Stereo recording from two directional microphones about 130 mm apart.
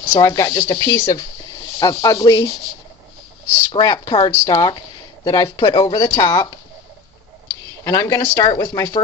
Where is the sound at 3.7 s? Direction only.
30° left (ahead or behind).